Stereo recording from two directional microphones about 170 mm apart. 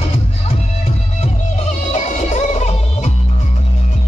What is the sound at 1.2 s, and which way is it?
Music, 45° left (ahead or behind).